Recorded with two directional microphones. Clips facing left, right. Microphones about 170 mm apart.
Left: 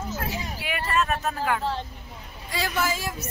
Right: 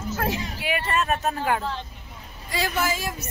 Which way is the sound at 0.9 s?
30° right (ahead or behind).